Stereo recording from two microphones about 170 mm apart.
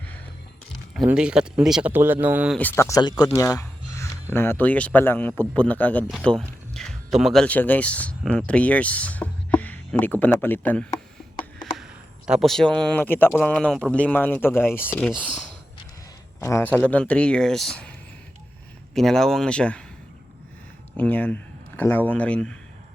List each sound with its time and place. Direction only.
0.9 s speech: 5° right (ahead or behind)
2.6 s speech: 15° left (ahead or behind)
11.6 s a sound: 5° right (ahead or behind)
13.4 s speech: 5° left (ahead or behind)
16.4 s speech: 15° left (ahead or behind)
18.9 s speech: centre (ahead or behind)
20.9 s speech: 10° left (ahead or behind)